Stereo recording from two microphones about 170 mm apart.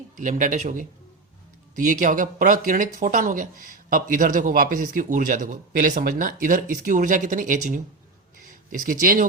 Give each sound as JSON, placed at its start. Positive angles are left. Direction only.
{"t": 0.2, "sound": "speech", "side_deg": -50}